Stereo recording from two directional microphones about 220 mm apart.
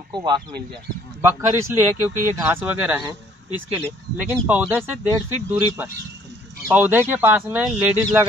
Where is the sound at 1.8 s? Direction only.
10° right (ahead or behind).